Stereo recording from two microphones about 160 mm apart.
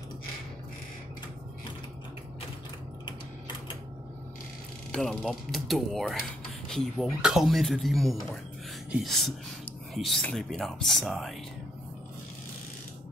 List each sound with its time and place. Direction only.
3.1 s typewriter: 30° left (ahead or behind)
4.9 s speech: centre (ahead or behind)